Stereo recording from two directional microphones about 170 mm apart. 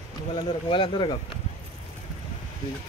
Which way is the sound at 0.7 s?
30° left (ahead or behind).